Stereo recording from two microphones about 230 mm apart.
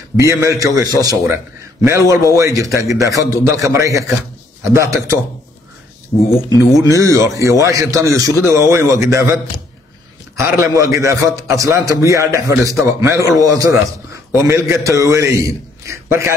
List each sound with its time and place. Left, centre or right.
0.3 s a man's voice: centre
6.8 s a man's voice: centre
10.4 s a man's voice: centre